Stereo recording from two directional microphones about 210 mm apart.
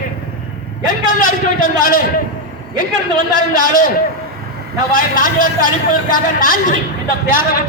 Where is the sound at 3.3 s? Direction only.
40° left (ahead or behind).